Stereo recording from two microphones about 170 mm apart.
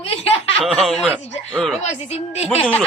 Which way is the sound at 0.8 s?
5° left (ahead or behind).